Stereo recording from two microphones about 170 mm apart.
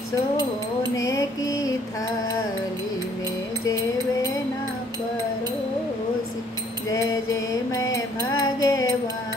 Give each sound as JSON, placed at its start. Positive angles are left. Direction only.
{"t": 0.9, "sound": "mantra", "side_deg": 20}
{"t": 7.7, "sound": "music", "side_deg": 20}